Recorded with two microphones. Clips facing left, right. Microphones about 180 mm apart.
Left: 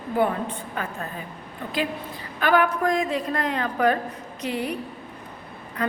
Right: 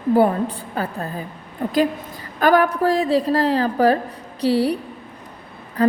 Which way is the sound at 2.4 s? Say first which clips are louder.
Right 5 dB; 40° right (ahead or behind).